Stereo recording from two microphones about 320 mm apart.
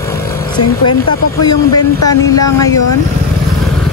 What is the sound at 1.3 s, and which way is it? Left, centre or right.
Speech, centre.